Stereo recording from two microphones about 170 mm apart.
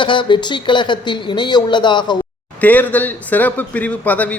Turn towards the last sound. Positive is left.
turn(degrees=10)  # may be behind; listen again after turning